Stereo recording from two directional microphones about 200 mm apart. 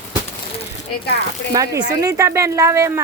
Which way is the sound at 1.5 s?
15° right (ahead or behind).